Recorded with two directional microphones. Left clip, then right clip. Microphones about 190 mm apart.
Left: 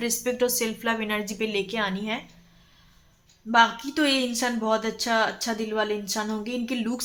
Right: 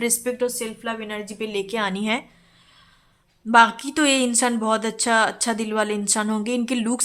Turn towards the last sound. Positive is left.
turn(degrees=-35)  # may be behind; listen again after turning